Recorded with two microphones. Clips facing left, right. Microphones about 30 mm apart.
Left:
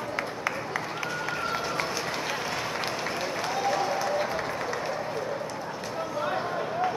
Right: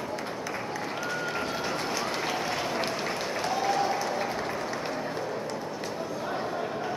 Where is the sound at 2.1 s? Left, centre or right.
Centre.